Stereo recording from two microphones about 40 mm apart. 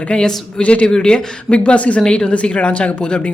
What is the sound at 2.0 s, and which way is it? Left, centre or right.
Speech, left.